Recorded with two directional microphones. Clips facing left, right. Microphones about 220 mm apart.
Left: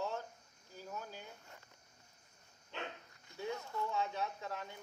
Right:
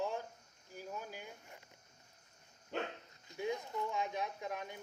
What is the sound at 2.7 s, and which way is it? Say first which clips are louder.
Speech: right 6 dB; 45° right (ahead or behind).